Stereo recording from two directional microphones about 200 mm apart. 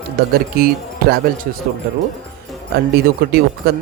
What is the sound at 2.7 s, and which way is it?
Speech, 50° right (ahead or behind).